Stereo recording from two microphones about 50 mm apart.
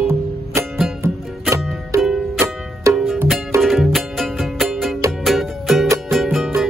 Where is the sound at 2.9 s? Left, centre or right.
Right.